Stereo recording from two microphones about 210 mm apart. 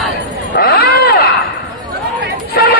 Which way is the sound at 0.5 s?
45° left (ahead or behind).